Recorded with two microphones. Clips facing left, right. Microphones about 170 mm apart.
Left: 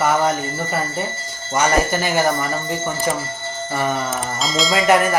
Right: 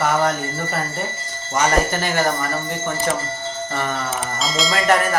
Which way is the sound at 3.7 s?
10° left (ahead or behind).